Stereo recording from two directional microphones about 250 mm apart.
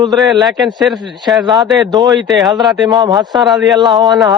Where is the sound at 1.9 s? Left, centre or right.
Centre.